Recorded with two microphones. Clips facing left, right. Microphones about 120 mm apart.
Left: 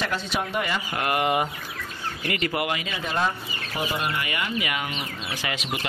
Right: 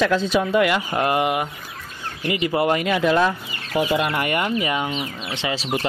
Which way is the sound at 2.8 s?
80° right.